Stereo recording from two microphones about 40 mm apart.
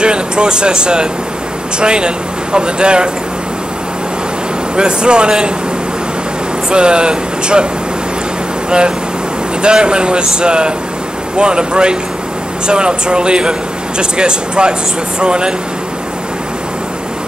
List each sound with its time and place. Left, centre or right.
0.0 s speech: right
4.7 s speech: right
6.7 s speech: right
8.6 s speech: right